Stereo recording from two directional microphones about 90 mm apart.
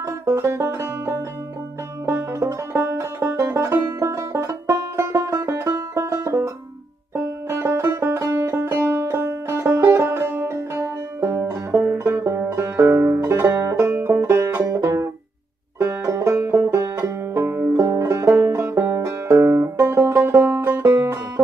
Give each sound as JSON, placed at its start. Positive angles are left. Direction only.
{"t": 0.0, "sound": "music", "side_deg": -35}
{"t": 2.0, "sound": "banjo", "side_deg": -30}
{"t": 3.3, "sound": "music", "side_deg": -45}
{"t": 3.6, "sound": "music", "side_deg": -30}
{"t": 12.0, "sound": "banjo", "side_deg": -30}